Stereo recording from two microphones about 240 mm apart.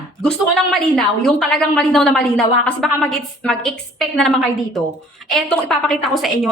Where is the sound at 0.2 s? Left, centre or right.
Centre.